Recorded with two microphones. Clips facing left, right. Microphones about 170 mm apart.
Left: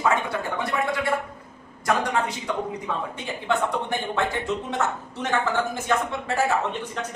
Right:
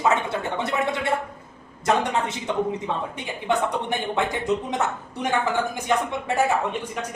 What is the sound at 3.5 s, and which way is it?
Speech, 15° right (ahead or behind).